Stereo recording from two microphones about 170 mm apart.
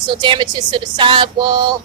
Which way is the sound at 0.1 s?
25° right (ahead or behind).